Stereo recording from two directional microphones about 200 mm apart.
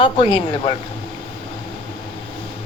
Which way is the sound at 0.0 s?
30° left (ahead or behind).